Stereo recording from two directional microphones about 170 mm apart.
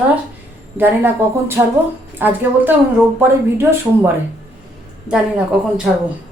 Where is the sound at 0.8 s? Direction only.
10° right (ahead or behind).